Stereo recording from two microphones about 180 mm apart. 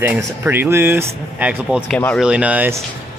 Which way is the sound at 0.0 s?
10° right (ahead or behind).